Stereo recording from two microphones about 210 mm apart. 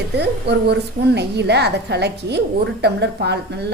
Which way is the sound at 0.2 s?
50° right (ahead or behind).